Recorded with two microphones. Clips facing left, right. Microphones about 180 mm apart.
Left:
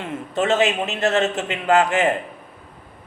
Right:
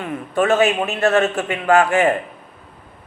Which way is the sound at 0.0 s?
20° left (ahead or behind).